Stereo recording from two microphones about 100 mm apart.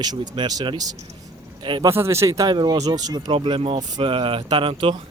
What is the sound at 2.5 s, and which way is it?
Speech, 45° right (ahead or behind).